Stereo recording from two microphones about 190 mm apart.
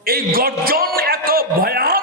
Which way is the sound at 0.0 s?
50° right (ahead or behind).